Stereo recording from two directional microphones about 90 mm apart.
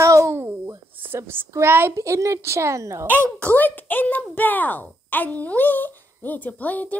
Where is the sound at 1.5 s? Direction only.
25° right (ahead or behind).